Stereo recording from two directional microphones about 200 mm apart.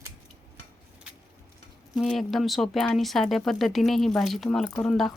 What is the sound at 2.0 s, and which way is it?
Speech, centre (ahead or behind).